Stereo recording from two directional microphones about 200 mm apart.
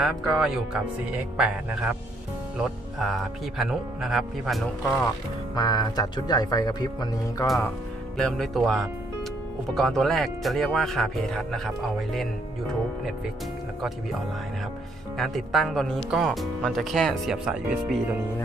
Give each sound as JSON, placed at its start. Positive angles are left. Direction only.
{"t": 0.0, "sound": "speech", "side_deg": -5}
{"t": 3.6, "sound": "speech", "side_deg": 0}
{"t": 5.5, "sound": "speech", "side_deg": 20}
{"t": 7.4, "sound": "speech", "side_deg": 0}
{"t": 15.2, "sound": "speech", "side_deg": 0}